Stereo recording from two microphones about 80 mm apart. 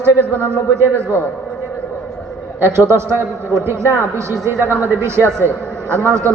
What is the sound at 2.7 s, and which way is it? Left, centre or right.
A man's voice, right.